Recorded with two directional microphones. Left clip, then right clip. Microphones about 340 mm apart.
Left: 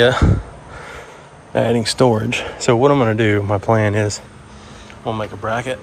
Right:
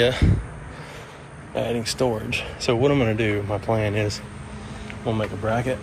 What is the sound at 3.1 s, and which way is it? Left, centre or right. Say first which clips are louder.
Speech: left 7 dB; left.